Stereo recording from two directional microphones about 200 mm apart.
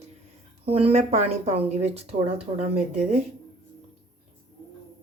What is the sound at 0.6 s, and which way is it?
A woman's voice, 30° right (ahead or behind).